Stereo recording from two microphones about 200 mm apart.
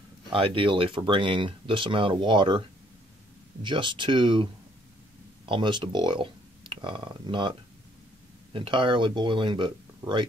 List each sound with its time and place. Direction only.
0.3 s speech: 25° right (ahead or behind)
3.6 s speech: 25° right (ahead or behind)
8.5 s speech: 25° right (ahead or behind)